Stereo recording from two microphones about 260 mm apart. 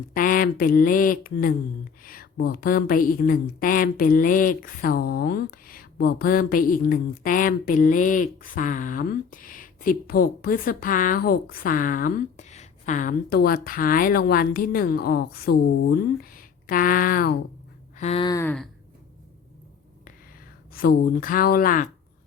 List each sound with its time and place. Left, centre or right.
0.1 s a woman's voice: left
17.9 s a sound: left; by 18.7 s centre
20.7 s a woman's voice: left